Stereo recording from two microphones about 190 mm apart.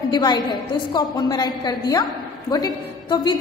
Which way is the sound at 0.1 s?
20° left (ahead or behind).